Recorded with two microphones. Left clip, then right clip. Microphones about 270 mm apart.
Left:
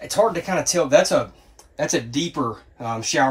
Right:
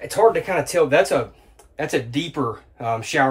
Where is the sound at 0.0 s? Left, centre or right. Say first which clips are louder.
Right 3 dB; centre.